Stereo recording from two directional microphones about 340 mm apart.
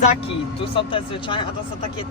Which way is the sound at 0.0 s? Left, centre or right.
Centre.